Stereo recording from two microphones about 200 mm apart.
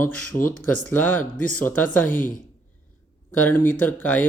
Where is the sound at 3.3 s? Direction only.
10° left (ahead or behind).